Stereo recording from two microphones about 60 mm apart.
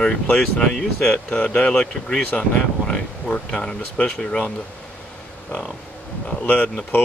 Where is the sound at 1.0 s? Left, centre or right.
Centre.